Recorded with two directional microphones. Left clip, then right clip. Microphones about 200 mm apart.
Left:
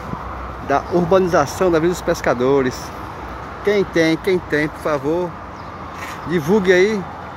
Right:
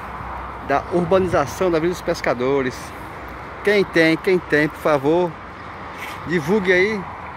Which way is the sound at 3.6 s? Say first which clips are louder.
Even; 15° right (ahead or behind).